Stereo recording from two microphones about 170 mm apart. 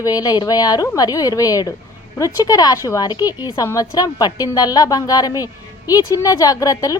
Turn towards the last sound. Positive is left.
turn(degrees=20)  # may be behind; listen again after turning